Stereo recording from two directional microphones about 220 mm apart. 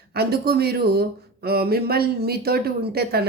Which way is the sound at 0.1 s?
45° right (ahead or behind).